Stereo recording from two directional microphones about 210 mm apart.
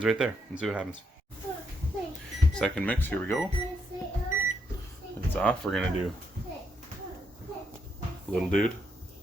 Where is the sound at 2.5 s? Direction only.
5° left (ahead or behind).